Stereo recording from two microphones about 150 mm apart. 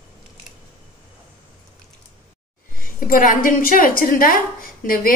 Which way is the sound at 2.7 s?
70° left (ahead or behind).